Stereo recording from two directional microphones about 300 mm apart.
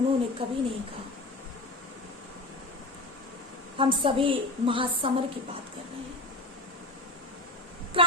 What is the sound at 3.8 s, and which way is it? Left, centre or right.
A woman's voice, centre.